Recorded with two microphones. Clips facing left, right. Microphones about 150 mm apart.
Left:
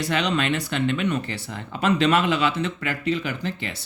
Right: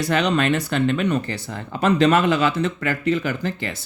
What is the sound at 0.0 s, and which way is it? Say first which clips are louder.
Speech: right 4 dB; 45° right (ahead or behind).